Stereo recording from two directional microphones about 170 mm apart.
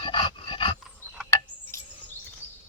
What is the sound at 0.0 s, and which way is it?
Dog, 30° left (ahead or behind).